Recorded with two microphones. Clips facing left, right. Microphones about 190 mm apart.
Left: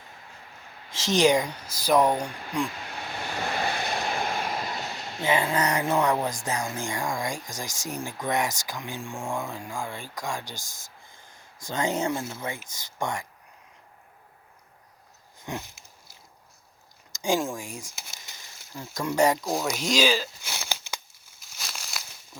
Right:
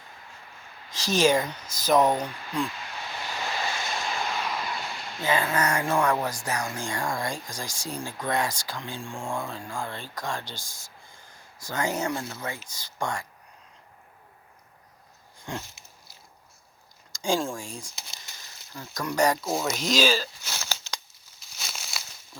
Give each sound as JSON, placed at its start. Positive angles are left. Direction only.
{"t": 0.9, "sound": "speech", "side_deg": 25}
{"t": 3.2, "sound": "waves", "side_deg": 55}
{"t": 5.2, "sound": "speech", "side_deg": 25}
{"t": 15.5, "sound": "speech", "side_deg": 20}
{"t": 17.1, "sound": "a sound", "side_deg": 20}
{"t": 18.9, "sound": "speech", "side_deg": 25}
{"t": 19.7, "sound": "crumpling", "side_deg": 10}
{"t": 21.6, "sound": "a sound", "side_deg": 0}